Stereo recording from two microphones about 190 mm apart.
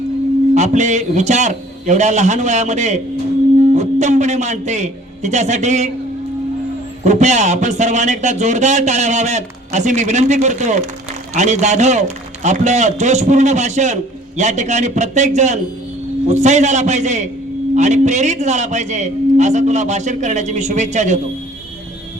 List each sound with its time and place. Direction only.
0.5 s a man's voice: 40° right (ahead or behind)
7.0 s a man's voice: 40° right (ahead or behind)